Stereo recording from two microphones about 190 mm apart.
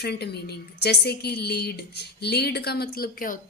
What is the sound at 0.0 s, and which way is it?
A woman's voice, 60° left (ahead or behind).